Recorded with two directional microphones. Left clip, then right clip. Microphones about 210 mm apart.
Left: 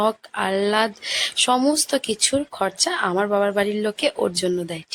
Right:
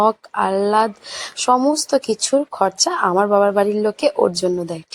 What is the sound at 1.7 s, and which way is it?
Speech, 20° left (ahead or behind).